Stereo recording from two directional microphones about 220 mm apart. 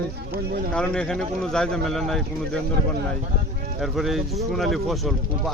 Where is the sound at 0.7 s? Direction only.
5° left (ahead or behind).